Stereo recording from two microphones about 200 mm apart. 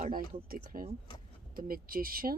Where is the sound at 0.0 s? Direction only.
45° right (ahead or behind).